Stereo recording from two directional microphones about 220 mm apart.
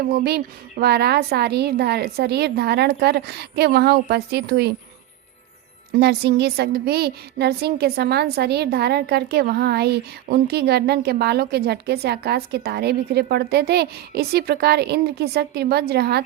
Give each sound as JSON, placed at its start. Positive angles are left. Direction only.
{"t": 0.0, "sound": "a woman's voice", "side_deg": -45}
{"t": 6.0, "sound": "a woman's voice", "side_deg": -45}